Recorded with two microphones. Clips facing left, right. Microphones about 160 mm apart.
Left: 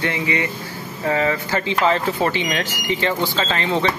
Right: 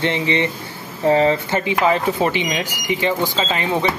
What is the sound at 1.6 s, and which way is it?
Speech, 15° right (ahead or behind).